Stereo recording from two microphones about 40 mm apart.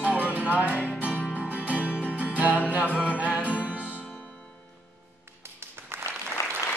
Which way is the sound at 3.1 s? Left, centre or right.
Right.